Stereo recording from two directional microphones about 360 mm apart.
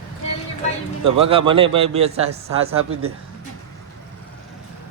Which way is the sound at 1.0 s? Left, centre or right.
Centre.